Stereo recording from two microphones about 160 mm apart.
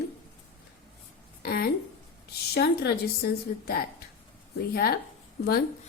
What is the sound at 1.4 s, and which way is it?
Speech, 70° left (ahead or behind).